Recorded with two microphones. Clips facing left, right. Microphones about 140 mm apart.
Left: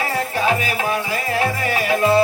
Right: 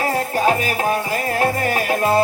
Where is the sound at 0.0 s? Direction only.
40° right (ahead or behind).